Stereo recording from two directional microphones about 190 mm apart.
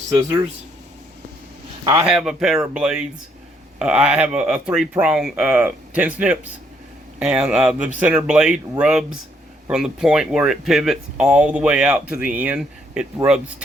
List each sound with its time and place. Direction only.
0.1 s speech: 20° right (ahead or behind)
1.8 s speech: 20° right (ahead or behind)
2.0 s speech: centre (ahead or behind)